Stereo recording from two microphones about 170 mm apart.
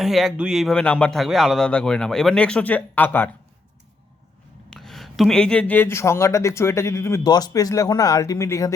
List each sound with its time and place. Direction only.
0.0 s speech: centre (ahead or behind)
4.7 s speech: centre (ahead or behind); by 8.7 s 20° left (ahead or behind)